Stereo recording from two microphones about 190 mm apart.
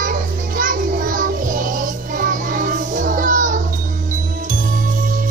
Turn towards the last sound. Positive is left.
turn(degrees=-45)  # may be behind; listen again after turning